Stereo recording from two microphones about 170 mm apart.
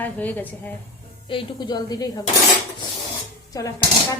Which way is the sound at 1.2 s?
25° left (ahead or behind).